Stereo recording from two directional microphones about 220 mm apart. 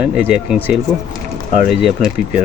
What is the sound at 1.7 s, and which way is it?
Speech, centre (ahead or behind).